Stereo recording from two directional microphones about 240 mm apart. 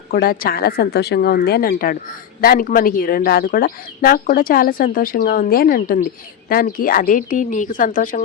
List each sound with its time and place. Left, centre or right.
0.1 s speech: left